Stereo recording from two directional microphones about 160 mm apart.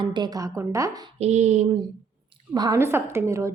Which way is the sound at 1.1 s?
45° right (ahead or behind).